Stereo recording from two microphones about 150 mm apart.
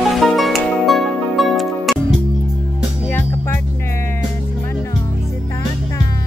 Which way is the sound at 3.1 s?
15° left (ahead or behind).